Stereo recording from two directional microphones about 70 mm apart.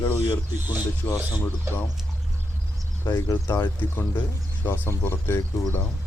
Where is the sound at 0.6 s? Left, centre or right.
Right.